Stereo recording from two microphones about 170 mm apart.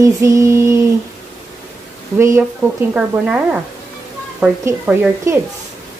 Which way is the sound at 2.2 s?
15° right (ahead or behind).